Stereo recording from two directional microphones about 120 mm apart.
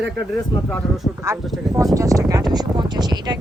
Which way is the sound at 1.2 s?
25° right (ahead or behind).